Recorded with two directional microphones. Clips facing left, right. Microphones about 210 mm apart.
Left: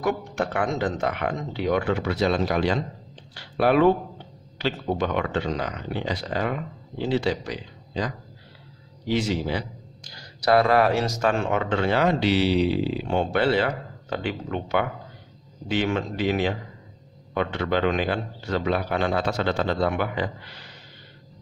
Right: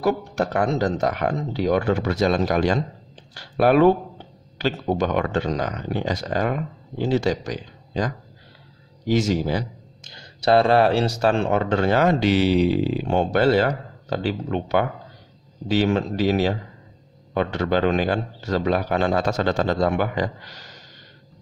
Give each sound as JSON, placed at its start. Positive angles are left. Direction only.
{"t": 0.0, "sound": "a man's voice", "side_deg": -35}
{"t": 10.0, "sound": "speech", "side_deg": -25}